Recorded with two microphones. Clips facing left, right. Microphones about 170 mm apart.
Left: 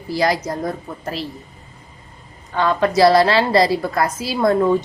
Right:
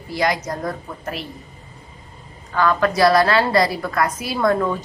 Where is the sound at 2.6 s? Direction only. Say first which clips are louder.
Left 2 dB; 25° left (ahead or behind).